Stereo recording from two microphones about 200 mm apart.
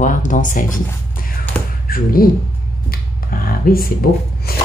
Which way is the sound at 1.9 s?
45° left (ahead or behind).